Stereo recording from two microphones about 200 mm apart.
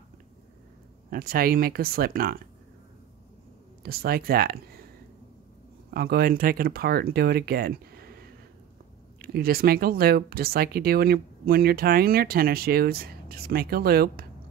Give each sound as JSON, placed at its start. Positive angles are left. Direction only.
{"t": 1.1, "sound": "speech", "side_deg": -45}
{"t": 3.8, "sound": "speech", "side_deg": -50}
{"t": 5.9, "sound": "speech", "side_deg": -50}